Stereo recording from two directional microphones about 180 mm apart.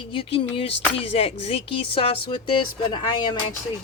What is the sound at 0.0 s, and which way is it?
Speech, 30° left (ahead or behind).